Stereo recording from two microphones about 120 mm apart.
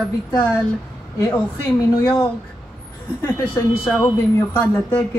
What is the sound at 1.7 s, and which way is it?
Speech, 30° left (ahead or behind).